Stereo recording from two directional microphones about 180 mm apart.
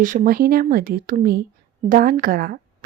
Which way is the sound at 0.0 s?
45° right (ahead or behind).